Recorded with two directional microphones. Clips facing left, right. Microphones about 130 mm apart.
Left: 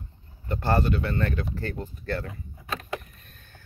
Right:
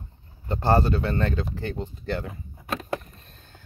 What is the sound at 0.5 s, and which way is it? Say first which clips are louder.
Speech: right 3 dB; 30° right (ahead or behind).